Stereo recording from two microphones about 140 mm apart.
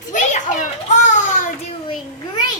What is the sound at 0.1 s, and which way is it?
Children playing, 60° left (ahead or behind).